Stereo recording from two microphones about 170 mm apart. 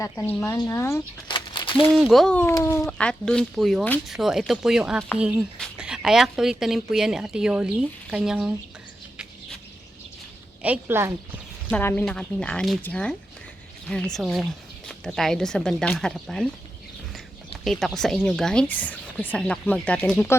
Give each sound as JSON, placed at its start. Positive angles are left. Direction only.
{"t": 0.0, "sound": "speech", "side_deg": 15}
{"t": 1.3, "sound": "a sound", "side_deg": 30}
{"t": 1.9, "sound": "speech", "side_deg": 0}
{"t": 10.6, "sound": "speech", "side_deg": -10}
{"t": 11.7, "sound": "speech", "side_deg": 10}
{"t": 17.6, "sound": "speech", "side_deg": 0}